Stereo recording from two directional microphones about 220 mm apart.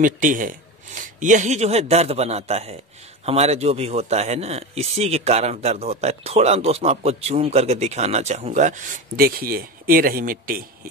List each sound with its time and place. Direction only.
0.0 s a man's voice: 35° right (ahead or behind)